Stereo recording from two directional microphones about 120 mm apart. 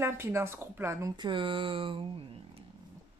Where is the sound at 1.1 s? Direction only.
45° right (ahead or behind).